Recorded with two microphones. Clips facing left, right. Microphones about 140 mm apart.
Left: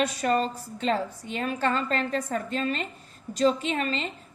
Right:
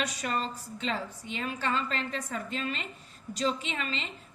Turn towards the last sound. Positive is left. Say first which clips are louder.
# left 7 dB
turn(degrees=45)  # may be behind; listen again after turning